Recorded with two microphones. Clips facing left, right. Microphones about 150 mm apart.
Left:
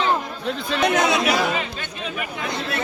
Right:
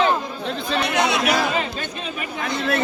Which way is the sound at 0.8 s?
45° left (ahead or behind).